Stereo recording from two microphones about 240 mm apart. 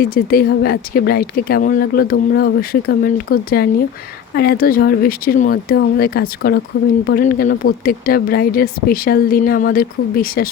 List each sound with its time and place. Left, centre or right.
0.0 s speech: left